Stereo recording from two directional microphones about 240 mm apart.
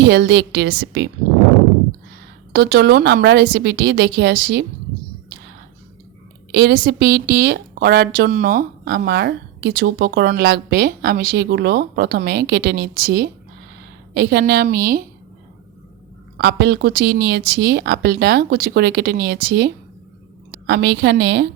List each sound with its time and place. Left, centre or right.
0.0 s a woman's voice: right
2.5 s a woman's voice: right
6.5 s a woman's voice: right
16.4 s a woman's voice: right